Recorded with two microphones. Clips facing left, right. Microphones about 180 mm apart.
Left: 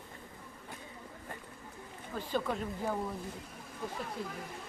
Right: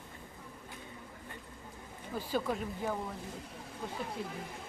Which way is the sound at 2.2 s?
5° right (ahead or behind).